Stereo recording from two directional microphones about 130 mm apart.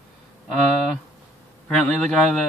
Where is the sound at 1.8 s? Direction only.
5° left (ahead or behind).